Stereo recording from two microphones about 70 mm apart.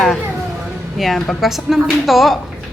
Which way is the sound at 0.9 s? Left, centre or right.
Centre.